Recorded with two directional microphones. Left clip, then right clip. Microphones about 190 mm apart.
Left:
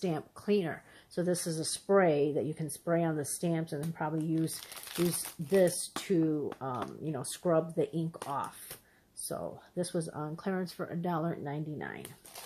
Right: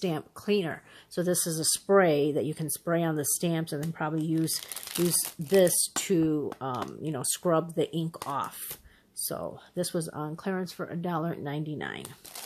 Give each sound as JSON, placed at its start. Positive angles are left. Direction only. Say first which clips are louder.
{"t": 0.0, "sound": "speech", "louder": "right 3 dB", "side_deg": -20}
{"t": 6.8, "sound": "speech", "louder": "right 3 dB", "side_deg": -15}
{"t": 7.1, "sound": "speech", "louder": "right 4 dB", "side_deg": -25}